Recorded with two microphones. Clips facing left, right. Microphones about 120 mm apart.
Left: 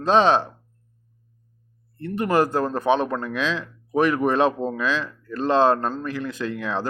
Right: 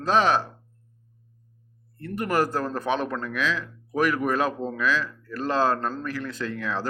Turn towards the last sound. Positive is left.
turn(degrees=20)  # may be behind; listen again after turning